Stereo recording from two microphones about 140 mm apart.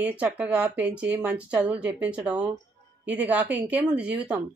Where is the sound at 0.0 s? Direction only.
10° right (ahead or behind).